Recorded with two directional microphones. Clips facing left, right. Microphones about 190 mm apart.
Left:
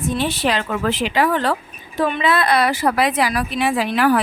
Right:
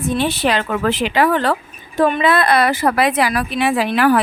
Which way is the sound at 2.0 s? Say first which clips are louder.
Right 4 dB; 45° right (ahead or behind).